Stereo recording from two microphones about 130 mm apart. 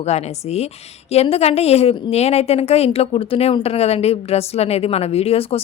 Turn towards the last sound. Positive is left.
turn(degrees=50)  # may be behind; listen again after turning